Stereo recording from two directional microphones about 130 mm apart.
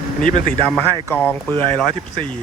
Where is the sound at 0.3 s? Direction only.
90° left.